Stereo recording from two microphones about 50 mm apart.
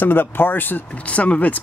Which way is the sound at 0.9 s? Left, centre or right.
Left.